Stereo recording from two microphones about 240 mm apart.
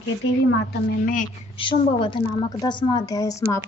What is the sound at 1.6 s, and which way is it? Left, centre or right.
A woman's voice, left.